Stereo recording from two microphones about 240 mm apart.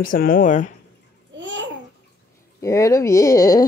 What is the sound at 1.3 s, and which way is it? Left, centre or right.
Babbling, right.